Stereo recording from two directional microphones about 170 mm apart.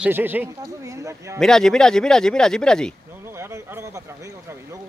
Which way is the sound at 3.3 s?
15° right (ahead or behind).